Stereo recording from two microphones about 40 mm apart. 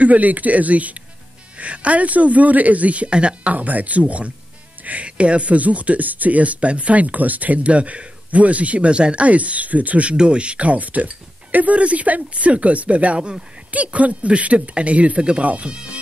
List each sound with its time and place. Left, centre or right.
0.0 s speech: right
3.5 s speech: right
10.1 s speech: right
15.7 s speech: right